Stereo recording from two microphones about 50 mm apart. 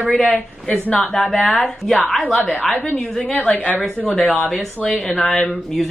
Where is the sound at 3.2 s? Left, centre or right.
Left.